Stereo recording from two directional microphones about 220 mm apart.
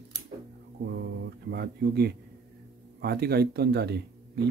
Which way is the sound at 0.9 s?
50° right (ahead or behind).